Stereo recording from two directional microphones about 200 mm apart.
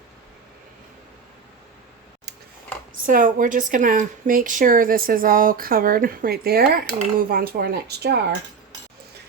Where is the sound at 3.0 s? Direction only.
45° right (ahead or behind).